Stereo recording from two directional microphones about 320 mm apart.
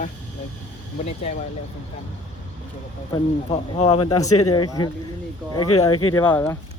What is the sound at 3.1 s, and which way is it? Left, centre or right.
Speech, centre.